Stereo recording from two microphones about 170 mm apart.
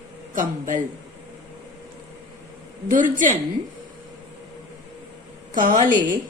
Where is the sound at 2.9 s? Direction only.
50° right (ahead or behind).